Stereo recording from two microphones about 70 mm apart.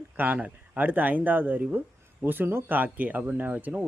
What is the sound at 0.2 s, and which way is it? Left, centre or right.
Speech, right.